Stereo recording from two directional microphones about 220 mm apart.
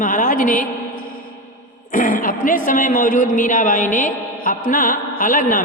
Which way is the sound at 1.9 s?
40° left (ahead or behind).